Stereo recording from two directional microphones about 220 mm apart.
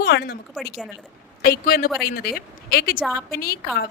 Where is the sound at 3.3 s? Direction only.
45° left (ahead or behind).